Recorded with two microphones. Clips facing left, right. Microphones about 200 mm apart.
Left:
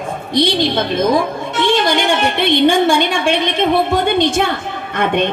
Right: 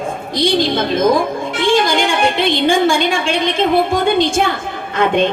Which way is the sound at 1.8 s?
60° left (ahead or behind).